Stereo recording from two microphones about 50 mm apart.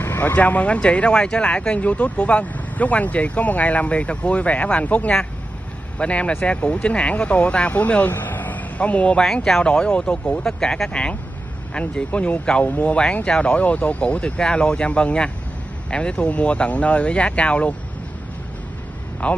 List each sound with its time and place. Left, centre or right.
0.0 s speech: left
9.2 s speech: centre; by 12.9 s left
12.9 s speech: left
19.2 s speech: left